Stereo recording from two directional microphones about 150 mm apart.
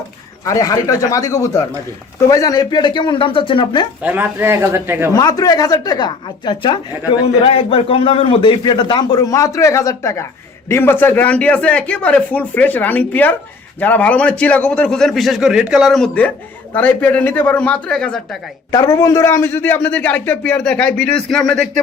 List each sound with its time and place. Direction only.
0.4 s a woman's voice: 25° left (ahead or behind)
4.0 s a man's voice: 10° right (ahead or behind)
5.1 s a woman's voice: 25° left (ahead or behind); by 18.2 s 5° left (ahead or behind)
18.7 s a man's voice: 20° left (ahead or behind); by 21.7 s 5° left (ahead or behind)